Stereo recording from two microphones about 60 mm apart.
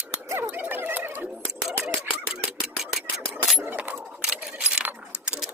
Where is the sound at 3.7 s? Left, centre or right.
Right.